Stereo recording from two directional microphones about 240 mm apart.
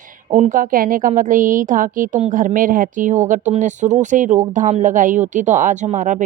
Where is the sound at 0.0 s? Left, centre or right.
Right.